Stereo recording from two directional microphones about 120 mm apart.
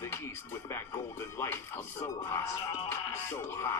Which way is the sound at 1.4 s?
20° left (ahead or behind).